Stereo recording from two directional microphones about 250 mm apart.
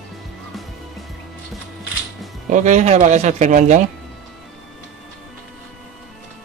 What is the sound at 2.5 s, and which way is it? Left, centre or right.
Speech, right.